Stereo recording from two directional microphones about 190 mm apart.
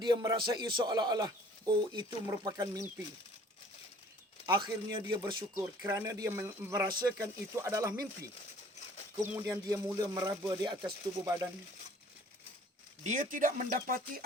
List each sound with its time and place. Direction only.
0.0 s speech: 20° right (ahead or behind)
4.4 s a man's voice: 20° right (ahead or behind)
13.0 s speech: 40° right (ahead or behind)